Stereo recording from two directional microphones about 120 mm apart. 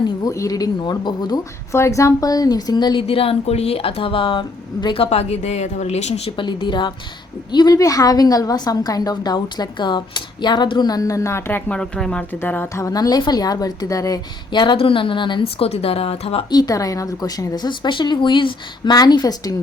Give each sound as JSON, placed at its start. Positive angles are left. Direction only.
{"t": 0.3, "sound": "a woman's voice", "side_deg": 30}
{"t": 1.7, "sound": "a woman's voice", "side_deg": 25}
{"t": 5.0, "sound": "a woman's voice", "side_deg": 60}
{"t": 6.3, "sound": "a woman's voice", "side_deg": 40}
{"t": 11.8, "sound": "a woman's voice", "side_deg": 5}
{"t": 12.4, "sound": "a woman's voice", "side_deg": 20}
{"t": 16.5, "sound": "a woman's voice", "side_deg": 30}